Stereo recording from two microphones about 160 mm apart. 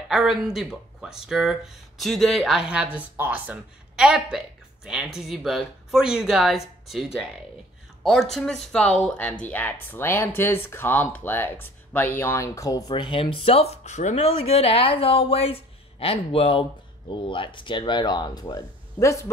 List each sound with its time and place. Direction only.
0.1 s speech: 5° right (ahead or behind)
8.0 s speech: centre (ahead or behind); by 19.3 s 20° left (ahead or behind)